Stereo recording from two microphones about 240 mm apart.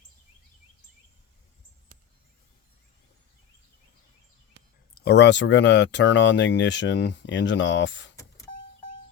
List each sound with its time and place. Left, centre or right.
4.9 s speech: left